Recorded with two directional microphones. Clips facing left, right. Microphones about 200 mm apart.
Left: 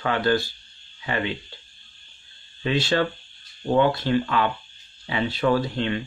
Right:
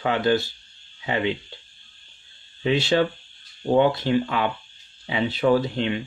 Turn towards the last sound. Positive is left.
turn(degrees=-15)  # may be behind; listen again after turning